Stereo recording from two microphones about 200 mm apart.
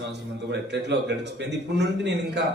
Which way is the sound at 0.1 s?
60° right (ahead or behind).